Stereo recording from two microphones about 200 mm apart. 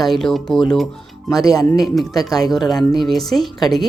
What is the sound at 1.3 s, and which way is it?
Speech, 15° left (ahead or behind).